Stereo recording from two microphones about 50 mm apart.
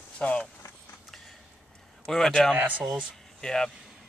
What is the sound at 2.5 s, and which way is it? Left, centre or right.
Speech, right.